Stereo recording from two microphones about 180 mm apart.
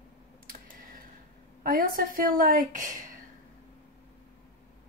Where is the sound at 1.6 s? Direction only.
50° right (ahead or behind).